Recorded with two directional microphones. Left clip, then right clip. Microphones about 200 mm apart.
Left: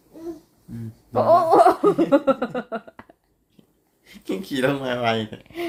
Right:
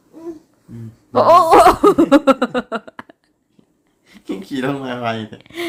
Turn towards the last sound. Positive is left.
turn(degrees=5)  # may be behind; listen again after turning